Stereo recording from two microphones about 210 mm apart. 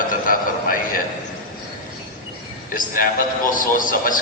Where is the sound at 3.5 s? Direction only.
40° left (ahead or behind).